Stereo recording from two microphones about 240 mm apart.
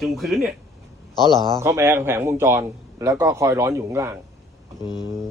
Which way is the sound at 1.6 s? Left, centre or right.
Centre.